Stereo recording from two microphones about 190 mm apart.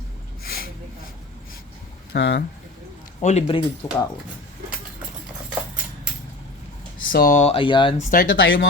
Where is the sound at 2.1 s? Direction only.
65° left (ahead or behind).